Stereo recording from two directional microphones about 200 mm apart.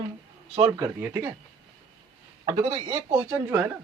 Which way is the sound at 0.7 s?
15° right (ahead or behind).